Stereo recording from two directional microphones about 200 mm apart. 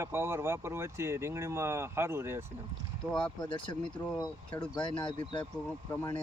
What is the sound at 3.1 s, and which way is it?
Speech, 5° left (ahead or behind).